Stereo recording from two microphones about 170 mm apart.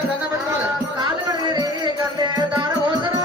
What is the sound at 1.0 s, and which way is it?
Music, 25° right (ahead or behind).